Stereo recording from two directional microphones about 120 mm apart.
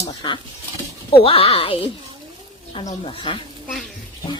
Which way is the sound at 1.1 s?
50° left (ahead or behind).